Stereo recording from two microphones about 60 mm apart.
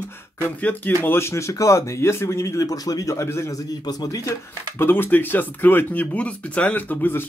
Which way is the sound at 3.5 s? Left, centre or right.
Left.